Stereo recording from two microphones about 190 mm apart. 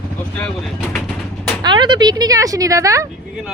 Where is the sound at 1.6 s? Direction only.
25° right (ahead or behind).